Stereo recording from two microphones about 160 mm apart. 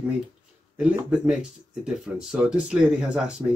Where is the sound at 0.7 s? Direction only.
5° right (ahead or behind).